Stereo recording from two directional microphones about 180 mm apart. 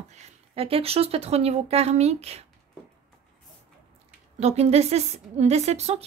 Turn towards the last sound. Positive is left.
turn(degrees=-35)  # may be behind; listen again after turning